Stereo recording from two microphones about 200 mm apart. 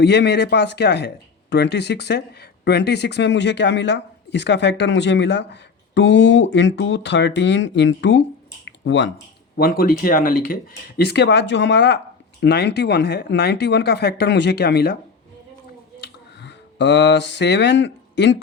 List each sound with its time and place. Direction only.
0.0 s speech: 55° left (ahead or behind)
9.6 s speech: 45° left (ahead or behind)
16.0 s a sound: 60° left (ahead or behind)